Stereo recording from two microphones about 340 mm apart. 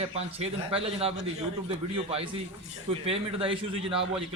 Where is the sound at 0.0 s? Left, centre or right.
Centre.